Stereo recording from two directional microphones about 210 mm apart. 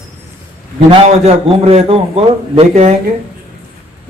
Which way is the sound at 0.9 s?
30° right (ahead or behind).